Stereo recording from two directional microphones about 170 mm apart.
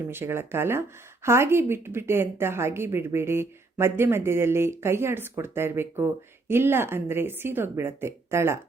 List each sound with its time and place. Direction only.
0.1 s a woman's voice: 15° right (ahead or behind)